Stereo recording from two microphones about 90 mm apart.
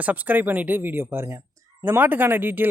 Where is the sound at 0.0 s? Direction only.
20° right (ahead or behind).